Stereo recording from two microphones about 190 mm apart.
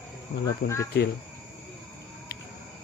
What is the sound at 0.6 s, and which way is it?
Speech, 55° left (ahead or behind).